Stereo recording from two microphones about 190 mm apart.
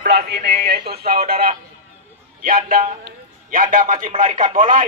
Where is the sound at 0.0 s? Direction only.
55° right (ahead or behind).